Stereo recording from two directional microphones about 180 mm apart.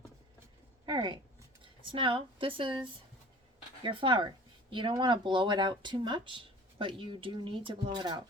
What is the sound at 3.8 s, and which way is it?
Speech, 25° right (ahead or behind).